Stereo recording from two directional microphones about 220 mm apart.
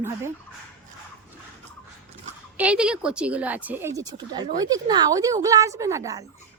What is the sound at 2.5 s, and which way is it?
Speech, 5° right (ahead or behind).